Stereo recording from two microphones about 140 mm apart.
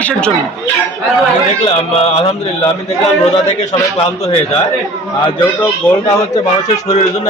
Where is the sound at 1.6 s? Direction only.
45° left (ahead or behind).